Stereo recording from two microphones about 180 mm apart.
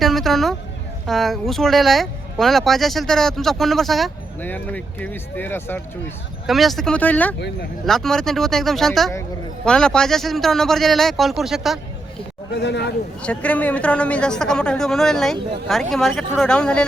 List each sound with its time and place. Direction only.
0.0 s speech: centre (ahead or behind)
6.5 s speech: centre (ahead or behind)
12.5 s speech: 70° left (ahead or behind)
13.2 s speech: 5° left (ahead or behind)